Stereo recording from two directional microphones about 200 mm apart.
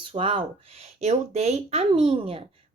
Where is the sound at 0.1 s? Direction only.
25° right (ahead or behind).